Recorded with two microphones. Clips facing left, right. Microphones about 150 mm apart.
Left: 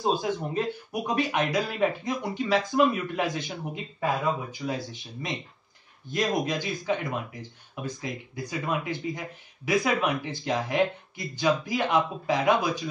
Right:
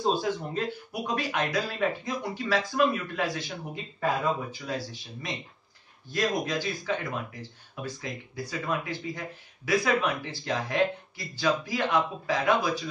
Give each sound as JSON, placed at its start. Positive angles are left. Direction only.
{"t": 0.1, "sound": "speech", "side_deg": 20}